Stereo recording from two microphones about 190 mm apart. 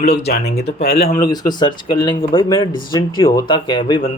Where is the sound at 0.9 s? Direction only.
55° left (ahead or behind).